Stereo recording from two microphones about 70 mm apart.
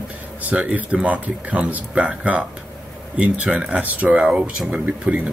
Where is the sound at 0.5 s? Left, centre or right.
Right.